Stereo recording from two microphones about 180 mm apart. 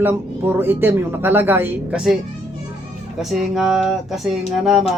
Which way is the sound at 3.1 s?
Centre (ahead or behind).